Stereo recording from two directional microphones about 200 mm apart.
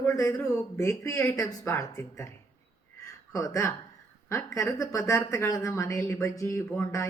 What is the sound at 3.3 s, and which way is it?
A woman's voice, 15° left (ahead or behind).